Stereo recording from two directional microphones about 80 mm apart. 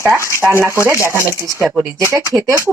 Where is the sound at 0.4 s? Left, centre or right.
Centre.